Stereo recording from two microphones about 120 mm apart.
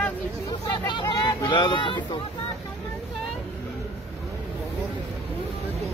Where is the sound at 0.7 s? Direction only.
40° left (ahead or behind).